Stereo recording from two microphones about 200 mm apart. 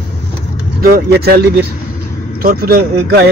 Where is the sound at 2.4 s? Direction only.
50° right (ahead or behind).